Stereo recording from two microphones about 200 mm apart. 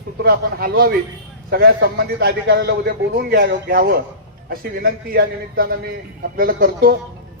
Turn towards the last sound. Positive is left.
turn(degrees=-45)  # may be behind; listen again after turning